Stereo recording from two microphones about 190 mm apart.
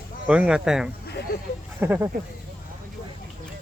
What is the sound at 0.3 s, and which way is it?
Speech, 5° right (ahead or behind).